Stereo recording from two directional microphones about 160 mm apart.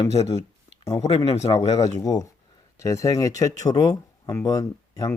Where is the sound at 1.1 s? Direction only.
40° left (ahead or behind).